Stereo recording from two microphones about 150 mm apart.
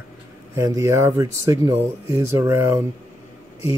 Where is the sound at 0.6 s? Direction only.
20° right (ahead or behind).